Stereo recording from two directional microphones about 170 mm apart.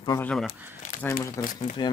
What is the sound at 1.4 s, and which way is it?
Speech, 50° left (ahead or behind).